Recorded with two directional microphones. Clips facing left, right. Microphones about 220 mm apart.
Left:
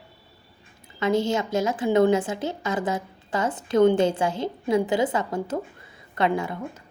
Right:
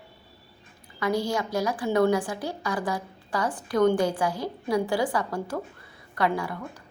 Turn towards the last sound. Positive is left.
turn(degrees=20)  # may be behind; listen again after turning